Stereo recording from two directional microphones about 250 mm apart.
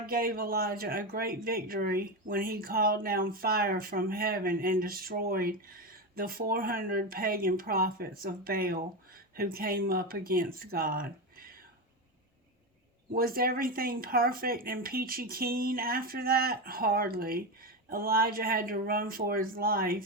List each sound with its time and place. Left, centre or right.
0.0 s speech: right
13.1 s speech: right